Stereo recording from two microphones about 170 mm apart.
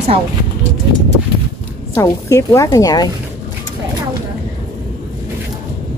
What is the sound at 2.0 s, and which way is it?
A woman's voice, 20° left (ahead or behind).